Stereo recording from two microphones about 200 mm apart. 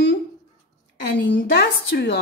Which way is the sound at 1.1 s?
55° left (ahead or behind).